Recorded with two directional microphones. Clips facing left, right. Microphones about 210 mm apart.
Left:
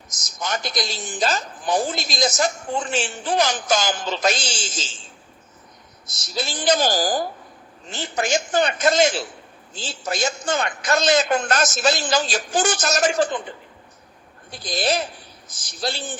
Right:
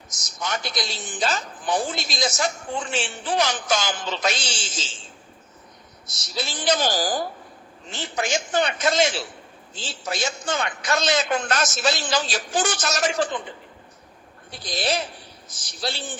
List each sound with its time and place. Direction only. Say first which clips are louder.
0.3 s a woman's voice: left 2 dB; 45° left (ahead or behind)
6.3 s a woman's voice: left 3 dB; 45° left (ahead or behind)
14.5 s a woman's voice: left 3 dB; 45° left (ahead or behind)